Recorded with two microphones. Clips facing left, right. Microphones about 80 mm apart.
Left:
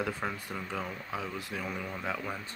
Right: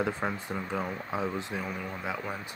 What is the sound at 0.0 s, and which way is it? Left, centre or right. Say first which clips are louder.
Speech: right 3 dB; right.